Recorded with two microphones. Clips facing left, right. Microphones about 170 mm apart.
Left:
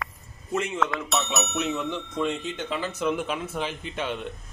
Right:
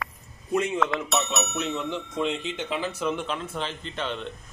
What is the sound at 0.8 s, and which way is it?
Speech, centre (ahead or behind).